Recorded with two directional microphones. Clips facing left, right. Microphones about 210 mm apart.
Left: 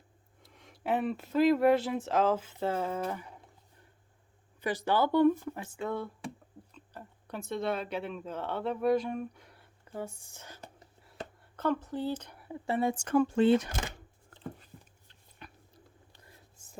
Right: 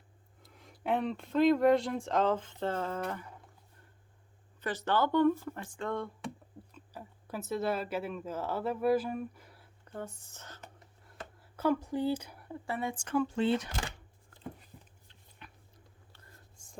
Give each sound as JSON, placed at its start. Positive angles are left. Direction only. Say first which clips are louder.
{"t": 0.4, "sound": "speech", "louder": "even", "side_deg": 0}
{"t": 4.6, "sound": "speech", "louder": "left 2 dB", "side_deg": 10}
{"t": 6.7, "sound": "speech", "louder": "even", "side_deg": -5}
{"t": 11.5, "sound": "speech", "louder": "right 1 dB", "side_deg": -10}
{"t": 12.6, "sound": "speech", "louder": "left 6 dB", "side_deg": 25}
{"t": 12.9, "sound": "speech", "louder": "left 3 dB", "side_deg": 45}
{"t": 15.4, "sound": "a sound", "louder": "left 4 dB", "side_deg": 40}
{"t": 16.1, "sound": "whispering", "louder": "left 1 dB", "side_deg": 10}